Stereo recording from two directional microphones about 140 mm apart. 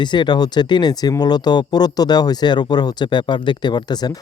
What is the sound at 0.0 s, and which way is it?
Speech, 35° left (ahead or behind).